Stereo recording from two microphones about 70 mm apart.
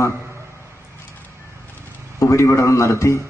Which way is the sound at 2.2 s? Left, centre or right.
Left.